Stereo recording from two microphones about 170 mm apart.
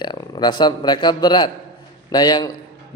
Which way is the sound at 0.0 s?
25° left (ahead or behind).